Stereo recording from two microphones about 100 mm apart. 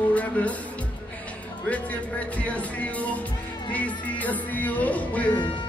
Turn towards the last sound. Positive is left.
turn(degrees=15)  # may be behind; listen again after turning